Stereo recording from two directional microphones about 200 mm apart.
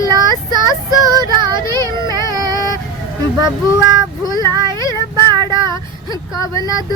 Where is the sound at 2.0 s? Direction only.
20° right (ahead or behind).